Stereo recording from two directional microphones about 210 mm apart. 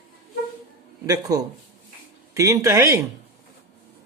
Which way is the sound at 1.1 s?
15° right (ahead or behind).